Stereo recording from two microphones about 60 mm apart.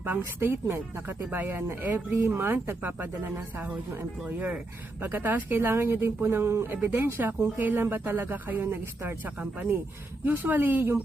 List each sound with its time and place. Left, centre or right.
0.0 s speech: right
9.4 s speech: right